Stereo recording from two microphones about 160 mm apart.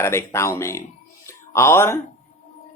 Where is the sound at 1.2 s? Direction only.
15° left (ahead or behind).